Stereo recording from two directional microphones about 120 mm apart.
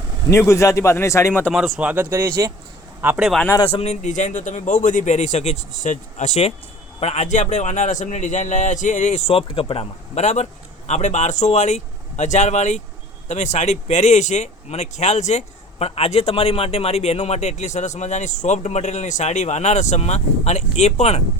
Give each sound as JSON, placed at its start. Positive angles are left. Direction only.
{"t": 0.3, "sound": "a man's voice", "side_deg": 25}
{"t": 1.5, "sound": "speech", "side_deg": 0}
{"t": 1.8, "sound": "speech", "side_deg": -15}
{"t": 3.2, "sound": "speech", "side_deg": 0}
{"t": 3.6, "sound": "a man's voice", "side_deg": 55}
{"t": 7.0, "sound": "a man's voice", "side_deg": 70}
{"t": 10.2, "sound": "speech", "side_deg": 75}